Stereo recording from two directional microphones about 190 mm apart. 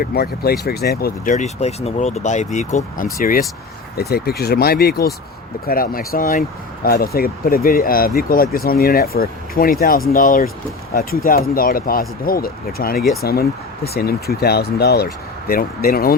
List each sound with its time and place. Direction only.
0.0 s speech: 55° left (ahead or behind)